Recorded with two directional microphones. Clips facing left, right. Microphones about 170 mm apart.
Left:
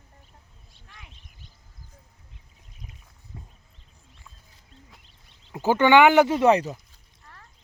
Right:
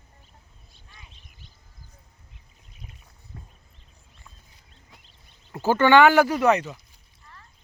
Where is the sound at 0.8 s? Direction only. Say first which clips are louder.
Left 2 dB; 75° left (ahead or behind).